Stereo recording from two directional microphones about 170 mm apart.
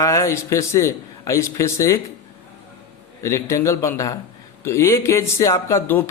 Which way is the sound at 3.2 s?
15° left (ahead or behind).